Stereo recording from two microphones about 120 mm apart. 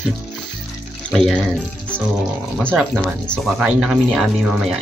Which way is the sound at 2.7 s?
15° right (ahead or behind).